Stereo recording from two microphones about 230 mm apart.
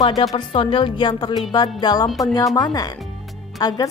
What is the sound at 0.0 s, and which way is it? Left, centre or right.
A woman's voice, centre.